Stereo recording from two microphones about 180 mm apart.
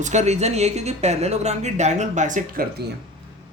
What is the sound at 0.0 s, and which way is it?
Speech, 40° right (ahead or behind).